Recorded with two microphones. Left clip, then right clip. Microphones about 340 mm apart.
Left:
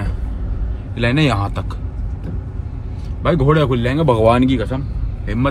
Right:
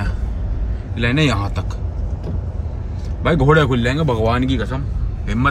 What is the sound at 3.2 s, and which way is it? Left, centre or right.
Speech, centre.